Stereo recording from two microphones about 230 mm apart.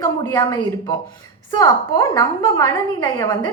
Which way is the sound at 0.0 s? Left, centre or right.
Centre.